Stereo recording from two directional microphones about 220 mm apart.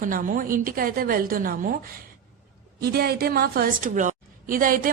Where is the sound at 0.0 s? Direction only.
40° right (ahead or behind).